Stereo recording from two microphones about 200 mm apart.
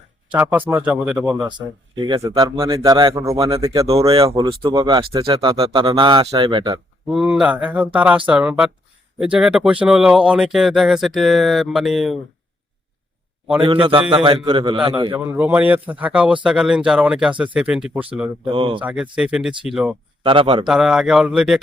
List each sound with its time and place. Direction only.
0.3 s speech: 10° right (ahead or behind)
1.5 s speech: 20° right (ahead or behind)
7.1 s speech: 5° right (ahead or behind)
13.6 s speech: 25° right (ahead or behind)
15.2 s speech: 10° right (ahead or behind)
18.5 s speech: 25° right (ahead or behind)
18.8 s speech: 5° right (ahead or behind)
20.2 s speech: 25° right (ahead or behind)
20.7 s speech: centre (ahead or behind)